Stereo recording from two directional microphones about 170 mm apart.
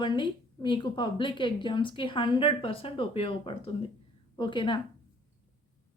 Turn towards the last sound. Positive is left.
turn(degrees=30)  # may be behind; listen again after turning